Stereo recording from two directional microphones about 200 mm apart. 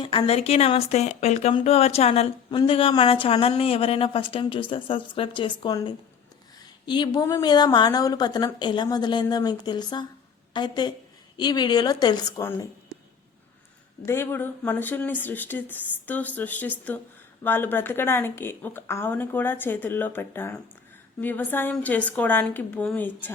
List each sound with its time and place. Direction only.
0.0 s speech: 25° left (ahead or behind)
14.0 s a woman's voice: 10° left (ahead or behind)